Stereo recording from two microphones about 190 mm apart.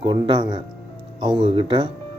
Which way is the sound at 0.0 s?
25° right (ahead or behind).